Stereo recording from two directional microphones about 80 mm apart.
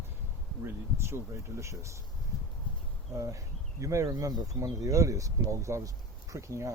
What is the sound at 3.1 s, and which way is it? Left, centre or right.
Speech, right.